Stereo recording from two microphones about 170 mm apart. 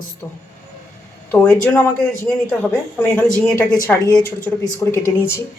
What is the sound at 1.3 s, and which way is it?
A man's voice, 10° left (ahead or behind).